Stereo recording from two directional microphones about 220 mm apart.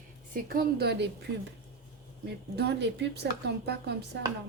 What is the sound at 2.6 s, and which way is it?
A woman's voice, 50° right (ahead or behind).